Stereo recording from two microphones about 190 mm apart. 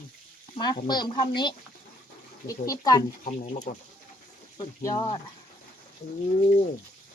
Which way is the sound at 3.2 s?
40° left (ahead or behind).